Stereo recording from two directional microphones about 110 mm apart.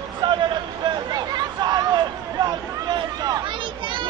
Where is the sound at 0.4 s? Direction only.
40° right (ahead or behind).